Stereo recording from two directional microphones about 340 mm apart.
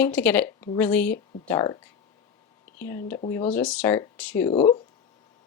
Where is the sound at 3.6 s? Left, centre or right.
Centre.